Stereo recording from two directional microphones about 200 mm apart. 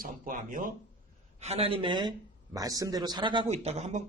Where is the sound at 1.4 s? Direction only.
30° right (ahead or behind).